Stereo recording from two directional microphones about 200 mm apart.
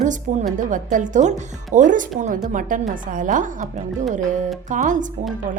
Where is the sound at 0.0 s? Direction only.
40° right (ahead or behind).